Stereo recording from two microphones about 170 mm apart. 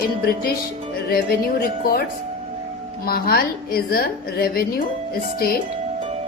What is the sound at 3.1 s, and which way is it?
A woman's voice, 60° left (ahead or behind).